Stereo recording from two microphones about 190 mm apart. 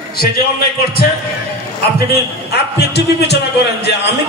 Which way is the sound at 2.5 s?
60° left (ahead or behind).